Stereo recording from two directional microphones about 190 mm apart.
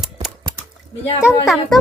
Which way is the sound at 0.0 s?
Centre (ahead or behind).